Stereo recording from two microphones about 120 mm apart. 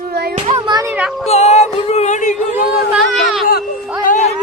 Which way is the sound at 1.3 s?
65° left (ahead or behind).